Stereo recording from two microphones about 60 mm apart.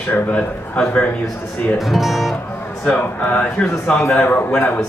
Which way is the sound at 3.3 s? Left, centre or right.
Centre.